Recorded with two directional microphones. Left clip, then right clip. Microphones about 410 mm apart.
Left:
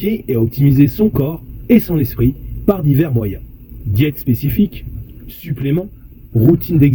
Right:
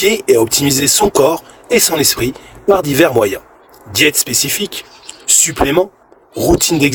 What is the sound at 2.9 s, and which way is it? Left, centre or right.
Speech, centre.